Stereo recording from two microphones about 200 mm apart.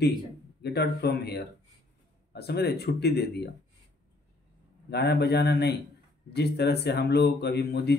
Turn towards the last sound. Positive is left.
turn(degrees=55)  # may be behind; listen again after turning